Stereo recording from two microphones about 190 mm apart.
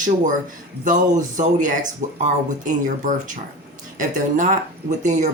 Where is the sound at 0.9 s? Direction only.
40° right (ahead or behind).